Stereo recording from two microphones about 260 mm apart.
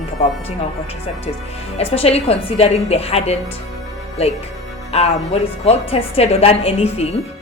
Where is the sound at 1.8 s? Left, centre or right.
Left.